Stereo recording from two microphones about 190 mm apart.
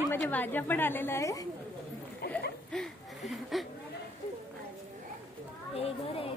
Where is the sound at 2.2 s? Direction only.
55° left (ahead or behind).